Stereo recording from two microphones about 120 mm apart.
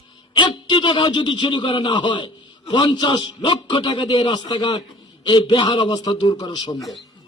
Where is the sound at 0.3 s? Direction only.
40° left (ahead or behind).